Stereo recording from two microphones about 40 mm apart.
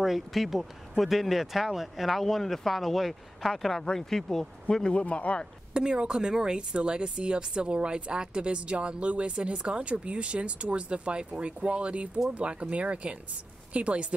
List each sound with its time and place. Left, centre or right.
0.0 s speech: centre
4.7 s speech: left
5.7 s speech: right